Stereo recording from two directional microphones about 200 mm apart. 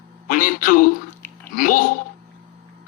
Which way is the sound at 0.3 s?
40° left (ahead or behind).